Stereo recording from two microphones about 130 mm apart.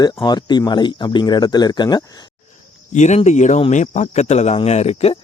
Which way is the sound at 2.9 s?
60° left (ahead or behind).